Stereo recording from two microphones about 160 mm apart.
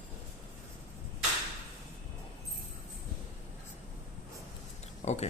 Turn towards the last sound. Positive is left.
turn(degrees=50)  # may be behind; listen again after turning